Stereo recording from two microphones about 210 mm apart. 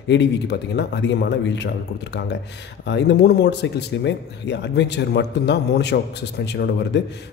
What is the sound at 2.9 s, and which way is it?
A man's voice, 55° left (ahead or behind).